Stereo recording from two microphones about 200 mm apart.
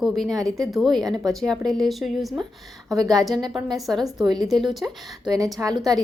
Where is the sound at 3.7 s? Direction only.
Centre (ahead or behind).